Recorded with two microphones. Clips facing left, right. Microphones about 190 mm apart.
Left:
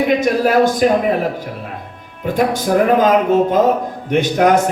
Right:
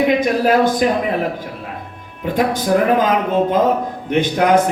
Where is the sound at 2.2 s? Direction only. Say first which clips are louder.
Left 1 dB; 45° left (ahead or behind).